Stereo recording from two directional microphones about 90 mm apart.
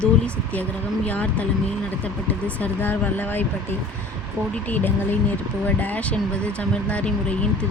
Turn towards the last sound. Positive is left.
turn(degrees=15)  # may be behind; listen again after turning